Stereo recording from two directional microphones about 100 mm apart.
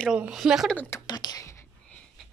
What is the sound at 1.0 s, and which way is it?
Speech, 40° left (ahead or behind).